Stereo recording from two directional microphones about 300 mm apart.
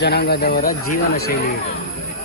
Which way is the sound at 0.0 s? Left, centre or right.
Left.